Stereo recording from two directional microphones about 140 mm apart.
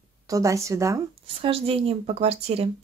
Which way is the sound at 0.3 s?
25° right (ahead or behind).